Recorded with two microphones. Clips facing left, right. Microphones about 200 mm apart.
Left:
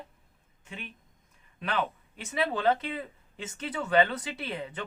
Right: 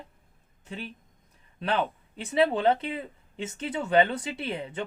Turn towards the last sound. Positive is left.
turn(degrees=-25)  # may be behind; listen again after turning